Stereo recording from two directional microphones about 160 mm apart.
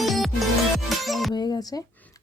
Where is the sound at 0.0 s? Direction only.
Centre (ahead or behind).